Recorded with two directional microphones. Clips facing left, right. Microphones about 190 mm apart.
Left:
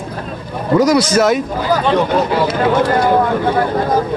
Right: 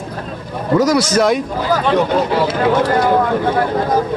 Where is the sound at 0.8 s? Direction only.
20° left (ahead or behind).